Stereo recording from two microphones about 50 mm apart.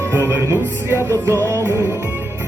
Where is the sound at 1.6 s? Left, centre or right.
Right.